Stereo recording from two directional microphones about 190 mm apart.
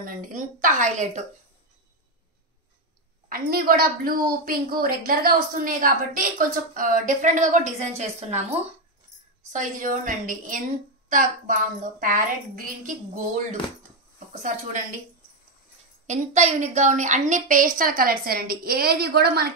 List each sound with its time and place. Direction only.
0.0 s a woman's voice: 45° right (ahead or behind)
3.3 s a woman's voice: 50° right (ahead or behind)
16.1 s a woman's voice: 35° right (ahead or behind); by 19.5 s 55° right (ahead or behind)